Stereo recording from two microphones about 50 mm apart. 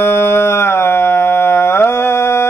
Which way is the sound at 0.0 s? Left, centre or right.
Left.